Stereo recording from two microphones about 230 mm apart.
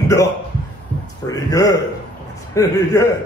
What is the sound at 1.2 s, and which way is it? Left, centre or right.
A man's voice, centre.